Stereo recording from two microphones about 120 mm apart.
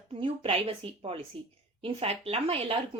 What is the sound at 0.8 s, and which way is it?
Speech, 50° right (ahead or behind).